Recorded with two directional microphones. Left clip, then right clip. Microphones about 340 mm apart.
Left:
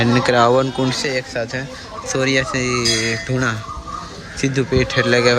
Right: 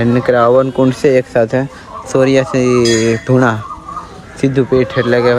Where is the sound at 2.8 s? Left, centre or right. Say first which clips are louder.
Right 6 dB; right.